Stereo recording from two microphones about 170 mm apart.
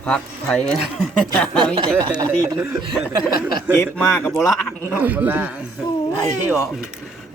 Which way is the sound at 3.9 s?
15° left (ahead or behind).